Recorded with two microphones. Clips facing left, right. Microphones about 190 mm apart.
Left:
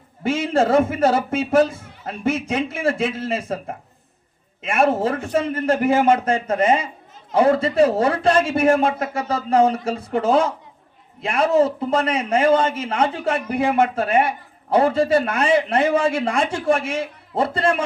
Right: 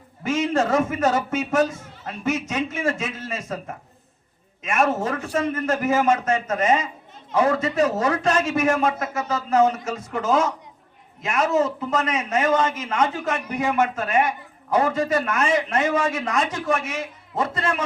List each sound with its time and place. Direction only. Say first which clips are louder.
0.2 s a man's voice: left 2 dB; 30° left (ahead or behind)